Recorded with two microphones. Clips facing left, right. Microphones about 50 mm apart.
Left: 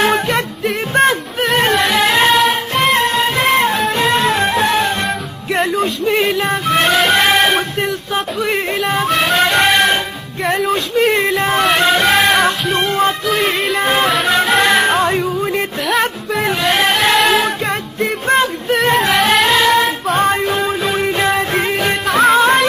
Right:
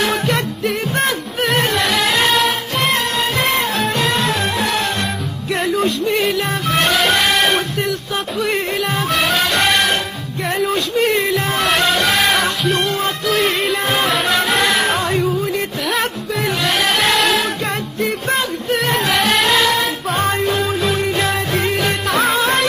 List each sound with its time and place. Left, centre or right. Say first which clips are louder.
1.7 s music: left 3 dB; centre
6.0 s music: left 3 dB; centre
7.2 s music: left 3 dB; left
8.4 s music: right 1 dB; centre
10.6 s a sound: left 1 dB; centre
11.8 s music: left 3 dB; centre
15.0 s music: left 3 dB; centre
16.4 s music: left 3 dB; centre
18.7 s music: left 3 dB; centre